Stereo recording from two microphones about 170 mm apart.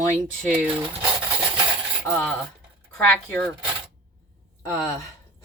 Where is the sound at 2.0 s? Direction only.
5° left (ahead or behind).